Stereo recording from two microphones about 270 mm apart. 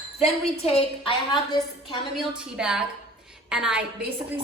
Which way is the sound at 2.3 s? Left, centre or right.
Centre.